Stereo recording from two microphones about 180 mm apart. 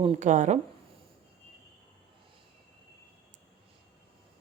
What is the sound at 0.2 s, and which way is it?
Speech, 40° right (ahead or behind).